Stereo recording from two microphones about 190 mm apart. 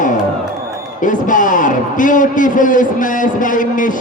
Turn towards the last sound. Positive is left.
turn(degrees=45)  # may be behind; listen again after turning